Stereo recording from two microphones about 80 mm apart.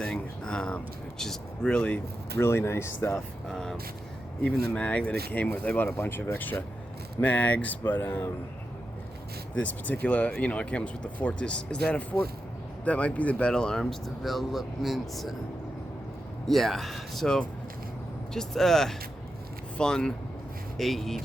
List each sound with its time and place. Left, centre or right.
0.0 s a sound: centre
1.2 s speech: centre
2.4 s speech: left
3.5 s speech: centre; by 8.3 s left
9.6 s speech: left; by 15.4 s centre
16.5 s speech: centre